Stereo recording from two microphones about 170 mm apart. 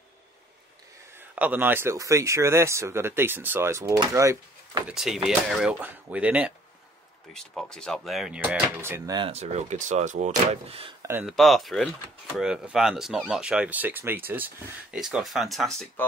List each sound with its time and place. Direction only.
1.1 s speech: 10° right (ahead or behind)
4.8 s speech: centre (ahead or behind)
7.3 s speech: 5° left (ahead or behind); by 9.3 s 20° right (ahead or behind)
9.3 s speech: 40° right (ahead or behind)
11.0 s speech: 15° right (ahead or behind)
11.2 s speech: centre (ahead or behind)